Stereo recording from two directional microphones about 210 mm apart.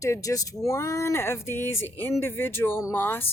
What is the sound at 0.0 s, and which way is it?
Speech, 15° left (ahead or behind).